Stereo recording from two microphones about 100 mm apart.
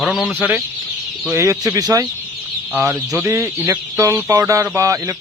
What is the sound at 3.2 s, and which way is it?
Speech, 25° right (ahead or behind).